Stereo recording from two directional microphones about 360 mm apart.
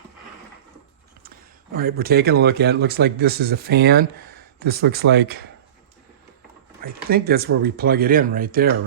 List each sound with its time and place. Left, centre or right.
1.7 s speech: right
6.8 s speech: right